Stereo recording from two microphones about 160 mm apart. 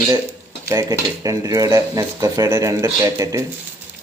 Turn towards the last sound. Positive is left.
turn(degrees=-20)  # may be behind; listen again after turning